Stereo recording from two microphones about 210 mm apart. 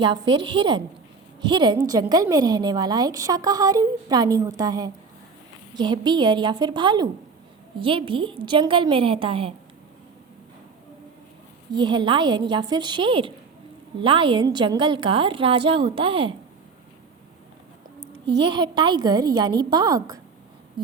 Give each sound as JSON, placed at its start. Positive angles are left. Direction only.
{"t": 0.0, "sound": "a woman's voice", "side_deg": -20}
{"t": 11.7, "sound": "a woman's voice", "side_deg": -20}
{"t": 18.3, "sound": "a woman's voice", "side_deg": -20}